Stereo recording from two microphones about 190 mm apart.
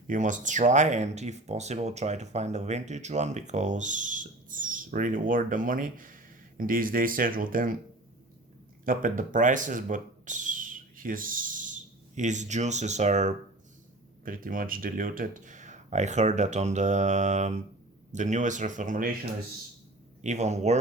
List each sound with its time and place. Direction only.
0.1 s speech: 40° right (ahead or behind)
8.8 s speech: 45° right (ahead or behind)
20.2 s speech: 35° right (ahead or behind)